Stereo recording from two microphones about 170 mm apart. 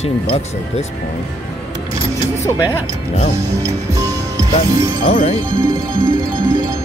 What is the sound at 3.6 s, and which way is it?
Music, 20° right (ahead or behind).